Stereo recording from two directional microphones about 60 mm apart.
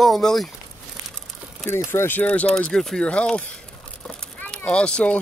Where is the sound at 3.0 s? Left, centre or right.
Centre.